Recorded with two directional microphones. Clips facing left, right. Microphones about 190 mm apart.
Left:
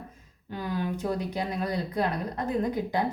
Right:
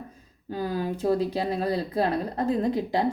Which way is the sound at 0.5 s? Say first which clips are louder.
Right 3 dB; 35° right (ahead or behind).